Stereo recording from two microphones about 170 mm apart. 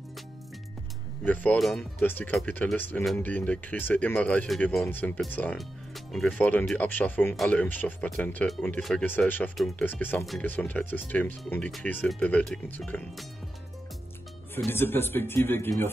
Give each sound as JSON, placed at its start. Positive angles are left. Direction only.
{"t": 1.2, "sound": "speech", "side_deg": 10}
{"t": 14.7, "sound": "speech", "side_deg": 15}